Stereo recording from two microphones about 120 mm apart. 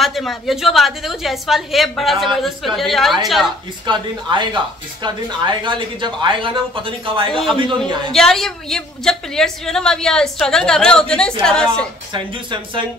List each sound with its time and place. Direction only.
0.0 s a woman's voice: centre (ahead or behind)
3.8 s speech: 40° right (ahead or behind)
7.2 s a woman's voice: 5° left (ahead or behind)
12.1 s speech: 40° right (ahead or behind)